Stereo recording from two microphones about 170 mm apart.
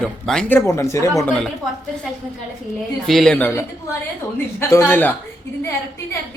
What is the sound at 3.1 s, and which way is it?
Speech, centre (ahead or behind).